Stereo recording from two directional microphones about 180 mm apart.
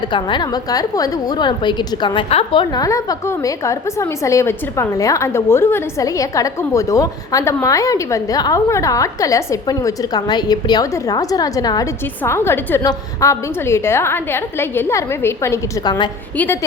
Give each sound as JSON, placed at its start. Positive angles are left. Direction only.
{"t": 0.1, "sound": "a woman's voice", "side_deg": 25}